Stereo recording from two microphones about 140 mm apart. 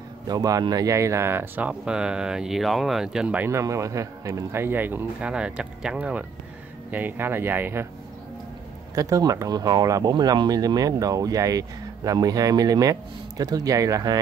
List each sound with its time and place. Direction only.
0.3 s speech: 25° right (ahead or behind); by 3.4 s 5° right (ahead or behind)
3.4 s speech: 20° right (ahead or behind)
8.9 s speech: 25° right (ahead or behind)